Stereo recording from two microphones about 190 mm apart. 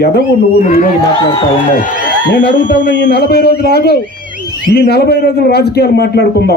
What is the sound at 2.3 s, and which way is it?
A man's voice, 65° left (ahead or behind).